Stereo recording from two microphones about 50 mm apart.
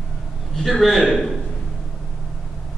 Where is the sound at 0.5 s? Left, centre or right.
Centre.